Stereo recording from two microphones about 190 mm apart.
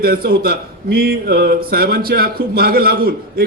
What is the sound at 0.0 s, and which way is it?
A man's voice, 55° right (ahead or behind).